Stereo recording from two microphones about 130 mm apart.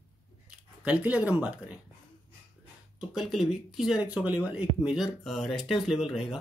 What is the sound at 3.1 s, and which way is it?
Speech, centre (ahead or behind).